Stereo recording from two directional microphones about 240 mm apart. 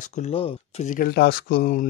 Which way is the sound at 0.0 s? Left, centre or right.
Left.